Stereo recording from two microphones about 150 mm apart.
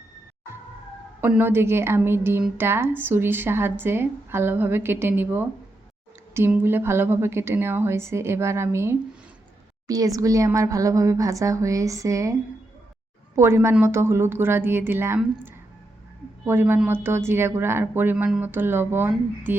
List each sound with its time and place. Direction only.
1.2 s a woman's voice: 15° right (ahead or behind)
13.3 s speech: 20° right (ahead or behind)